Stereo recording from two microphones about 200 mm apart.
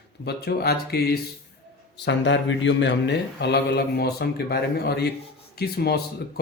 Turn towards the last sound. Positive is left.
turn(degrees=55)  # may be behind; listen again after turning